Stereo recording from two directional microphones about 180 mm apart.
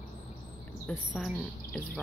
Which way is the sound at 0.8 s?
5° left (ahead or behind).